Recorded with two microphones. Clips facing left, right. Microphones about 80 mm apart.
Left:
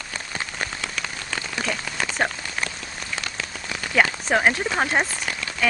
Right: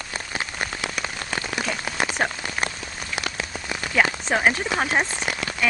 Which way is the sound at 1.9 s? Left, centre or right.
Centre.